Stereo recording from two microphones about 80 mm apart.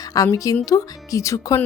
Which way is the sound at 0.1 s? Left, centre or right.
Left.